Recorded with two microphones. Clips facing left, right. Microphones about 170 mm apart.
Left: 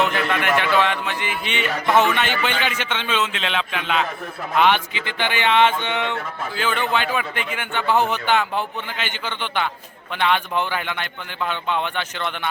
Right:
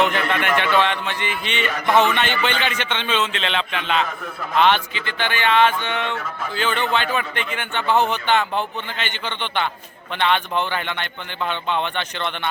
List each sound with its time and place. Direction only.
0.0 s speech: 5° left (ahead or behind)
6.6 s speech: 5° left (ahead or behind)